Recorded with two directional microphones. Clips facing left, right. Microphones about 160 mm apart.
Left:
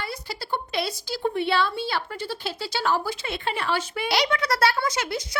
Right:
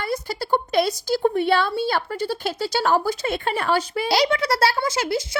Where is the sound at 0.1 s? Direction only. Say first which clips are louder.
Right 8 dB; 45° right (ahead or behind).